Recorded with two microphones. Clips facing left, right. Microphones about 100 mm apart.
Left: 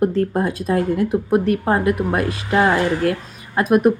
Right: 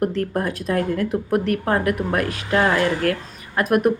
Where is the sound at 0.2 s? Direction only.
25° left (ahead or behind).